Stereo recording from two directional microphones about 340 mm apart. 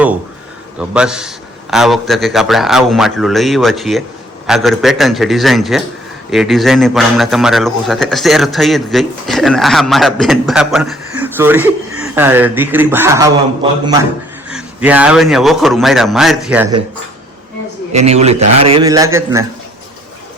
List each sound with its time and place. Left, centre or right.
0.8 s a man's voice: centre
17.9 s a man's voice: centre